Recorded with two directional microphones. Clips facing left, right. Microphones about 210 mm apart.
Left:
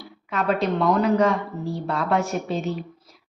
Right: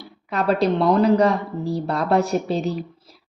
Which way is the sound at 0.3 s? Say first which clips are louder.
Right 3 dB; 35° right (ahead or behind).